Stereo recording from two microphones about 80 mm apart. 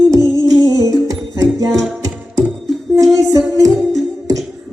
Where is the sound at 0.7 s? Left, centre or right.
Right.